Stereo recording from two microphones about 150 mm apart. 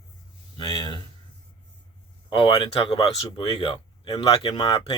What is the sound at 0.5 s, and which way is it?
Speech, 30° left (ahead or behind).